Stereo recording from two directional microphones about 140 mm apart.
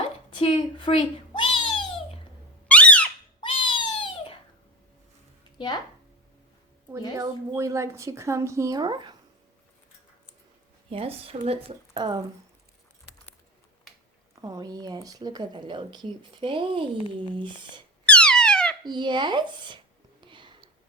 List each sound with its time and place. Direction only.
0.3 s cat: 35° left (ahead or behind)
2.6 s a sound: 10° left (ahead or behind)
3.4 s cat: 40° left (ahead or behind)
5.5 s speech: 30° left (ahead or behind)
7.2 s a woman's voice: 20° right (ahead or behind)
10.8 s speech: 45° right (ahead or behind)
11.9 s a woman's voice: 30° right (ahead or behind)
14.4 s a woman's voice: 30° right (ahead or behind)
18.1 s a sound: 5° left (ahead or behind)
18.9 s a woman's voice: 35° right (ahead or behind)
20.2 s a sound: 35° right (ahead or behind)